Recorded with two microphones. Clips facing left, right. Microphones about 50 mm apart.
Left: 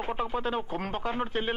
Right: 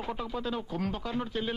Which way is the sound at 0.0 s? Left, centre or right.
Left.